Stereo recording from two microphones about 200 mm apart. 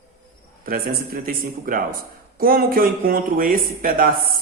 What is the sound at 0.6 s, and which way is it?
Speech, 45° right (ahead or behind).